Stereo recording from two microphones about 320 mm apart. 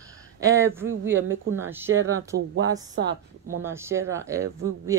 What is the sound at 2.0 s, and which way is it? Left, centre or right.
Speech, right.